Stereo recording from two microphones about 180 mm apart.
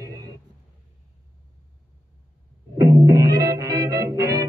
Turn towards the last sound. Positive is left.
turn(degrees=-20)  # may be behind; listen again after turning